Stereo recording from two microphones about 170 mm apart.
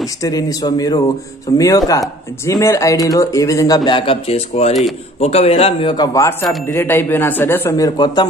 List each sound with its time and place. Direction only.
0.2 s a man's voice: 20° left (ahead or behind)
6.1 s speech: 20° left (ahead or behind)